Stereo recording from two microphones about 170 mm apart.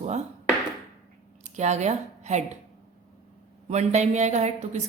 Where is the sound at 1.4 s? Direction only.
45° right (ahead or behind).